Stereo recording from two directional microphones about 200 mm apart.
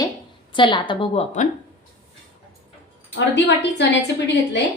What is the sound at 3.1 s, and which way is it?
Speech, 60° left (ahead or behind).